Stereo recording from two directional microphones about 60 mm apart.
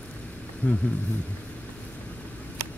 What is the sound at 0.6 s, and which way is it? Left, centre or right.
Speech, left.